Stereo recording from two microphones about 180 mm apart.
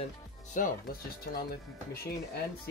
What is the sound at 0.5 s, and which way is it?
Speech, 45° left (ahead or behind).